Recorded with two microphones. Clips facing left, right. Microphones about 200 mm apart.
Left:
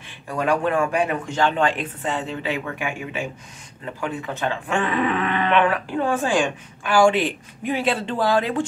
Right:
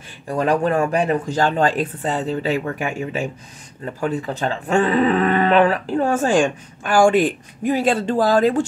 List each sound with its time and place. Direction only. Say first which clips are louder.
0.3 s speech: right 3 dB; 35° right (ahead or behind)